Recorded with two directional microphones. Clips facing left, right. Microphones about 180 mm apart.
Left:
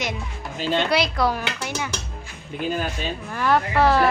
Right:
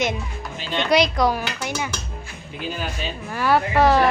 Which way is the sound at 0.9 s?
15° right (ahead or behind).